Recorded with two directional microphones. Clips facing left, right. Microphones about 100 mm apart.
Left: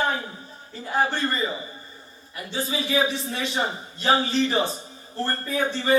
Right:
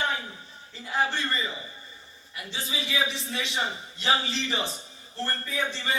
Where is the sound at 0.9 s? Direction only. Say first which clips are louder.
Left 4 dB; 45° left (ahead or behind).